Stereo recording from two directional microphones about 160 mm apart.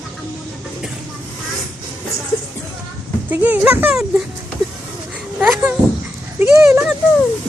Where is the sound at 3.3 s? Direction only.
10° right (ahead or behind).